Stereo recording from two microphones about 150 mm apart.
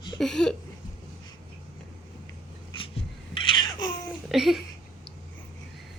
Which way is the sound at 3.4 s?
35° left (ahead or behind).